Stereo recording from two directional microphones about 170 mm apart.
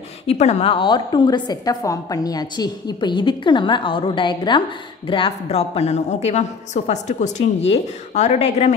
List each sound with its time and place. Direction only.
0.3 s a woman's voice: 40° left (ahead or behind)